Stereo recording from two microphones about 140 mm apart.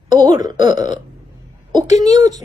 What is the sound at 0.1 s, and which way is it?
A woman's voice, 30° right (ahead or behind).